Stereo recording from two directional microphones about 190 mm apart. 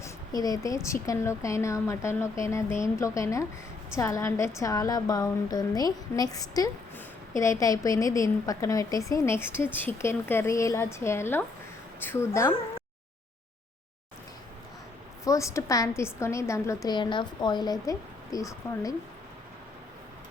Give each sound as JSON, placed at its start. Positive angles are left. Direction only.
{"t": 0.0, "sound": "a woman's voice", "side_deg": 20}
{"t": 15.2, "sound": "a woman's voice", "side_deg": 15}